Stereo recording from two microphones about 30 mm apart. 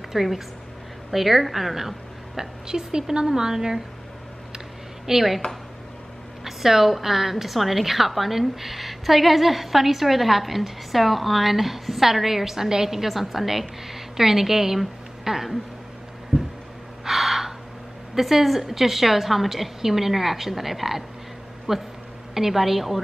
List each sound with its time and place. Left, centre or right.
0.1 s a woman's voice: centre
2.3 s speech: centre
5.0 s a woman's voice: centre
6.4 s a woman's voice: centre
17.0 s gasp: centre
18.2 s a woman's voice: centre